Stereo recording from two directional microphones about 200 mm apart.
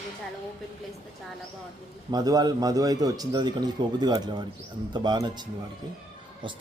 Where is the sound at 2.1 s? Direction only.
20° right (ahead or behind).